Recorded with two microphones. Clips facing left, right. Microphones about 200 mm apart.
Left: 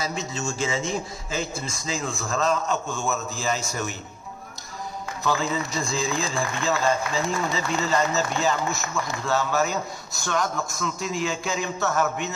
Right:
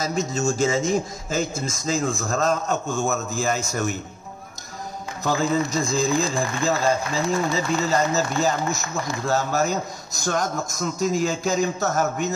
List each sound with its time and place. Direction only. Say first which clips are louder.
0.0 s a man's voice: right 6 dB; 45° right (ahead or behind)
5.2 s speech: right 4 dB; 45° right (ahead or behind)